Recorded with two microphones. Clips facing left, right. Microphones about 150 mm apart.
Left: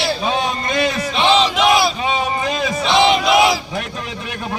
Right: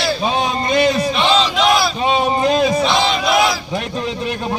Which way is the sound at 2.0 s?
30° right (ahead or behind).